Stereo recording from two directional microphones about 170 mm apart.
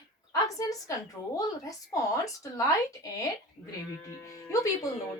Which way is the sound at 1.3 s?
20° left (ahead or behind).